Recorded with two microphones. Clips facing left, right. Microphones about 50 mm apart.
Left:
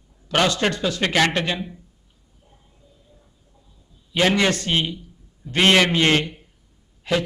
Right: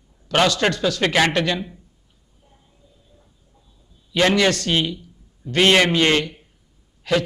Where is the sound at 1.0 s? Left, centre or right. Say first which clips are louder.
Right 1 dB; centre.